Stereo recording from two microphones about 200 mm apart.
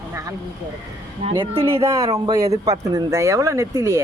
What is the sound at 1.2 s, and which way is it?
Speech, 25° right (ahead or behind).